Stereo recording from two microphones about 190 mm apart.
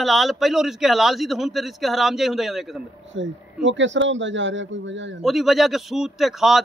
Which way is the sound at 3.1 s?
75° right (ahead or behind).